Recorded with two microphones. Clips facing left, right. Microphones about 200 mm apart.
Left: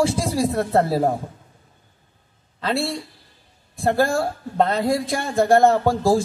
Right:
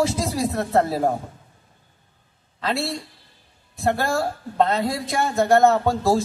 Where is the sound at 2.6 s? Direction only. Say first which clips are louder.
Left 2 dB; 30° left (ahead or behind).